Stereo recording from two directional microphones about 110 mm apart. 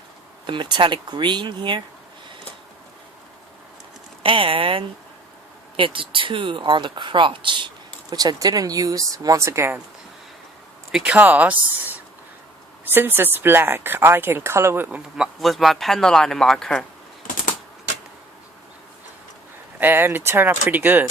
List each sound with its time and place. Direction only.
0.4 s speech: 45° right (ahead or behind)
4.2 s speech: 55° right (ahead or behind)
8.1 s speech: 35° right (ahead or behind)
10.9 s speech: 10° right (ahead or behind); by 14.8 s 25° right (ahead or behind)
14.8 s speech: 5° right (ahead or behind)
19.8 s speech: 20° right (ahead or behind)